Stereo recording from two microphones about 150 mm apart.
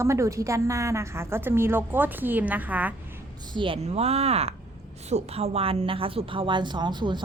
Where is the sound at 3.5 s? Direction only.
35° right (ahead or behind).